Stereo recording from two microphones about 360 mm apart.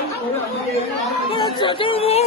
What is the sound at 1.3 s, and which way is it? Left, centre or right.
Speech, centre.